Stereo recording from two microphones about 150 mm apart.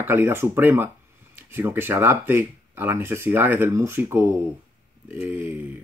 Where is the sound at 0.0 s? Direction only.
15° right (ahead or behind).